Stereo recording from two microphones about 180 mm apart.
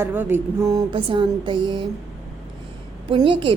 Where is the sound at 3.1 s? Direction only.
30° right (ahead or behind).